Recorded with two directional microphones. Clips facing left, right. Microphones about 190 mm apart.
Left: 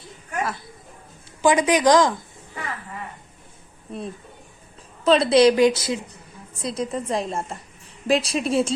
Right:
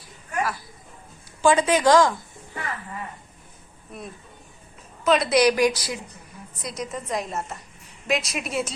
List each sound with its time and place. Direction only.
0.0 s a sound: 25° left (ahead or behind)
1.4 s speech: 15° left (ahead or behind)
3.9 s a woman's voice: 30° left (ahead or behind)